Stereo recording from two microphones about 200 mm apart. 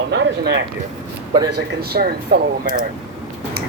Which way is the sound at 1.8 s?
50° right (ahead or behind).